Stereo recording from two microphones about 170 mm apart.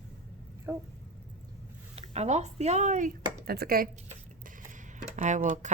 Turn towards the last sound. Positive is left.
turn(degrees=-45)  # may be behind; listen again after turning